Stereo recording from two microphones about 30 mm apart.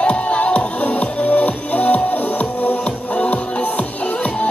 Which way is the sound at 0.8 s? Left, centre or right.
Left.